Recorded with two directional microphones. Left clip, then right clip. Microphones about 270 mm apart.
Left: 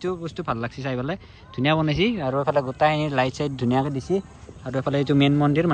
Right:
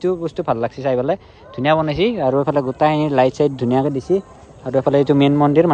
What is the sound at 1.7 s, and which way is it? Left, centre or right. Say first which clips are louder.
A man's voice: right 6 dB; centre.